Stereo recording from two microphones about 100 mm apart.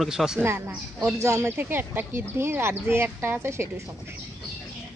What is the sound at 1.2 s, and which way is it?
Speech, 30° right (ahead or behind).